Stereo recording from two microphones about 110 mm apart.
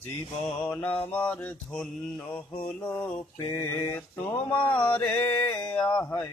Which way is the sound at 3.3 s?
40° left (ahead or behind).